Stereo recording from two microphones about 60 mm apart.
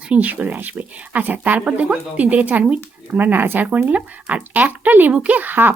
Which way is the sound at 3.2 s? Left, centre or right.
Right.